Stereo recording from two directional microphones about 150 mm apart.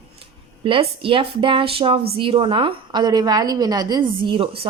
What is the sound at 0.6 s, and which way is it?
A woman's voice, 35° right (ahead or behind).